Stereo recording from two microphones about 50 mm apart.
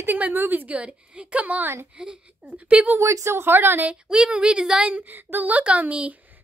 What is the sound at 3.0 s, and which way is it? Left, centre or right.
Speech, right.